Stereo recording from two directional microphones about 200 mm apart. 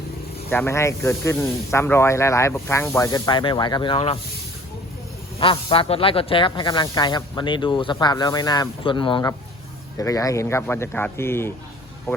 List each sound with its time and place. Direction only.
0.5 s speech: 10° left (ahead or behind)
5.4 s speech: 25° left (ahead or behind); by 12.2 s 10° left (ahead or behind)